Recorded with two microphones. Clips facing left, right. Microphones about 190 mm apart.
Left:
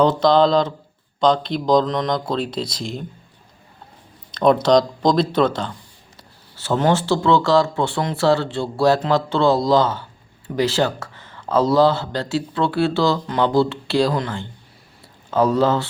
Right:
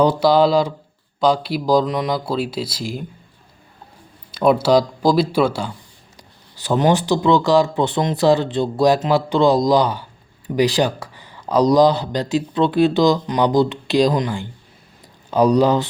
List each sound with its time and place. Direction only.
0.0 s speech: 10° right (ahead or behind)
4.3 s speech: 10° right (ahead or behind)